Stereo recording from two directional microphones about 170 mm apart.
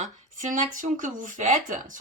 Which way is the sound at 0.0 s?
45° right (ahead or behind).